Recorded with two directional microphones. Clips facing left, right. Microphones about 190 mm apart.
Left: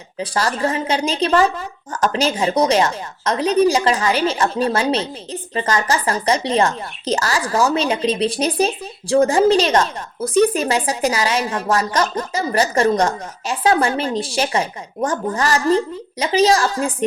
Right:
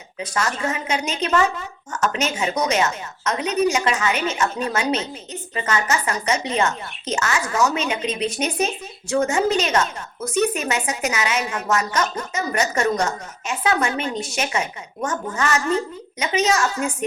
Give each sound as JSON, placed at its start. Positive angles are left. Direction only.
{"t": 0.2, "sound": "speech", "side_deg": 35}